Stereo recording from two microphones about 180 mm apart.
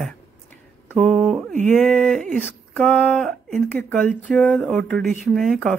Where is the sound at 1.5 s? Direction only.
45° right (ahead or behind).